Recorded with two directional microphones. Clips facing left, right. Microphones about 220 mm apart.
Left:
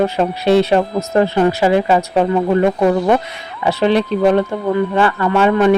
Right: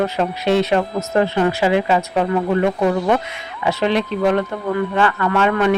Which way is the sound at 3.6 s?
35° left (ahead or behind).